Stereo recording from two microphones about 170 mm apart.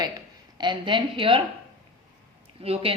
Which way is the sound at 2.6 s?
35° right (ahead or behind).